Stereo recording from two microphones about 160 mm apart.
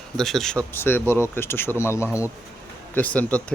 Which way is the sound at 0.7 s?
15° left (ahead or behind).